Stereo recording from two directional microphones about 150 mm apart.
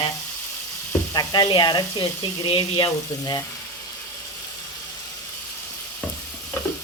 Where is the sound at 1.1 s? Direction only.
30° left (ahead or behind).